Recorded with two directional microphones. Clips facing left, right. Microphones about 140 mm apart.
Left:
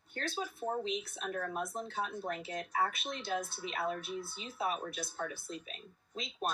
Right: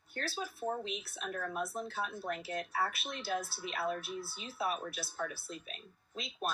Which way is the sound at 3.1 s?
5° right (ahead or behind).